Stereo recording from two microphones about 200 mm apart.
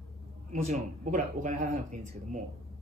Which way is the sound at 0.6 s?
40° right (ahead or behind).